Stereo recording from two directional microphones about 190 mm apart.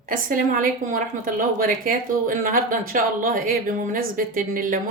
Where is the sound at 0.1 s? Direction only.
45° right (ahead or behind).